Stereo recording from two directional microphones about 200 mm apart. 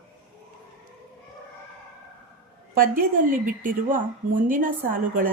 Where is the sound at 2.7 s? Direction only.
45° right (ahead or behind).